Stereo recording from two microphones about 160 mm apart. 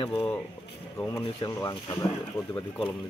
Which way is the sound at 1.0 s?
15° left (ahead or behind).